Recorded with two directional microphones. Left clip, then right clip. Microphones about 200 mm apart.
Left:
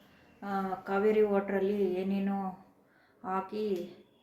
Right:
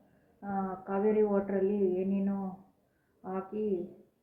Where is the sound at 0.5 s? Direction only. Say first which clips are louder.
Left 2 dB; 15° left (ahead or behind).